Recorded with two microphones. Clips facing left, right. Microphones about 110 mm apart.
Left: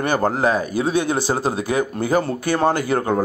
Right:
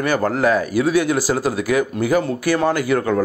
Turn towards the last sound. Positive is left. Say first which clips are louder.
# right 1 dB
turn(degrees=30)  # may be behind; listen again after turning